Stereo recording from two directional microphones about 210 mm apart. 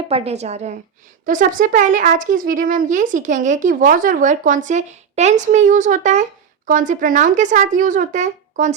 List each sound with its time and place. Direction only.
0.1 s speech: 30° right (ahead or behind)